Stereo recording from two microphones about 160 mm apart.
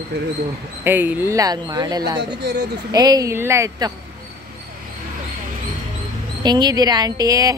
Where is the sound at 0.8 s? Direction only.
15° right (ahead or behind).